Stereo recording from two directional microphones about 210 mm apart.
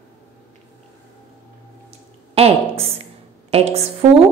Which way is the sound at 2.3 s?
30° right (ahead or behind).